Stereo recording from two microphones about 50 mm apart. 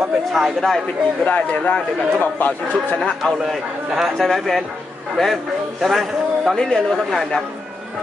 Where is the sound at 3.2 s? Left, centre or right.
Centre.